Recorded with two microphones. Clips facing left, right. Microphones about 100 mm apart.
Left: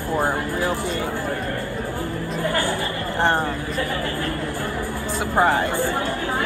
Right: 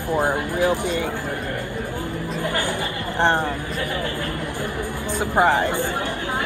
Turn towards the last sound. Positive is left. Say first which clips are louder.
# right 1 dB
turn(degrees=-20)  # may be behind; listen again after turning